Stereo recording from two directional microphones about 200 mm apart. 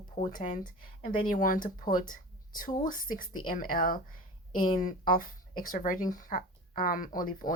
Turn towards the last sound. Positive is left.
turn(degrees=45)  # may be behind; listen again after turning